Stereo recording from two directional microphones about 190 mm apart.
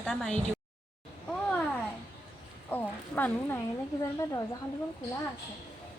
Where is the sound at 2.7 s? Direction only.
10° left (ahead or behind).